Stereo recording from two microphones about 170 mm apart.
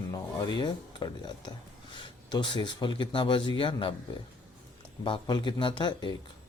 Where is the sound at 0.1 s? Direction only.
20° left (ahead or behind).